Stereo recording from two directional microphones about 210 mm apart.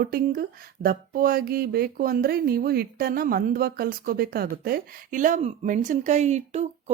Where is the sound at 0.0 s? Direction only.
45° right (ahead or behind).